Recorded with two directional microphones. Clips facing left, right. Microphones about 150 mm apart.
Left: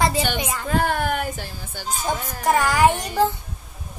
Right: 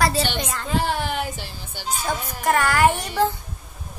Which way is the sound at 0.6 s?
50° left (ahead or behind).